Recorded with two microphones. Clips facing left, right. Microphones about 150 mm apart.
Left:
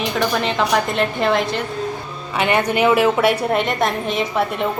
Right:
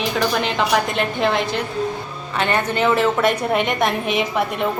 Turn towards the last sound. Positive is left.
turn(degrees=-15)  # may be behind; listen again after turning